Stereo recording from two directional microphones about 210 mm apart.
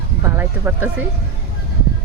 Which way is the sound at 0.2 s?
10° right (ahead or behind).